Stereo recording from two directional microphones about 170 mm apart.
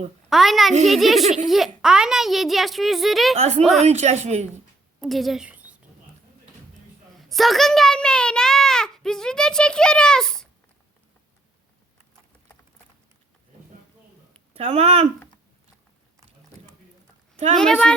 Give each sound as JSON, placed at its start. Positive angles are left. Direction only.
{"t": 0.3, "sound": "a child's voice", "side_deg": 0}
{"t": 3.3, "sound": "speech", "side_deg": -40}
{"t": 3.6, "sound": "a child's voice", "side_deg": 0}
{"t": 3.8, "sound": "speech", "side_deg": -40}
{"t": 4.9, "sound": "a woman's voice", "side_deg": 0}
{"t": 7.2, "sound": "a child's voice", "side_deg": 0}
{"t": 14.5, "sound": "speech", "side_deg": -40}
{"t": 17.6, "sound": "a child's voice", "side_deg": 5}